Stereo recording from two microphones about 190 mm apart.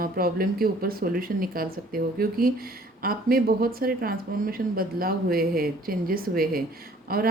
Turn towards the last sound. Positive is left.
turn(degrees=-50)  # may be behind; listen again after turning